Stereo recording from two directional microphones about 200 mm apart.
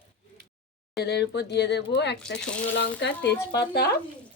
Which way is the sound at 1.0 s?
55° left (ahead or behind).